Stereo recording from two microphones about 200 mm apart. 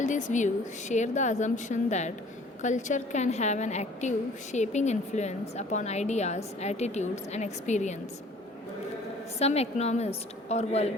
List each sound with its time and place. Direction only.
0.0 s a woman's voice: 40° left (ahead or behind)
9.4 s a woman's voice: 35° left (ahead or behind)